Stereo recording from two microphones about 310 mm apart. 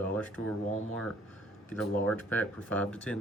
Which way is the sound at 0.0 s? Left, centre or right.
Centre.